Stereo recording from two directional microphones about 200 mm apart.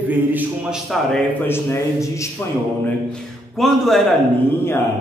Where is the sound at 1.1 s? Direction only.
10° left (ahead or behind).